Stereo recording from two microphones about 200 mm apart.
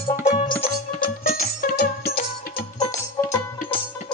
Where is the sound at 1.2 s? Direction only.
45° left (ahead or behind).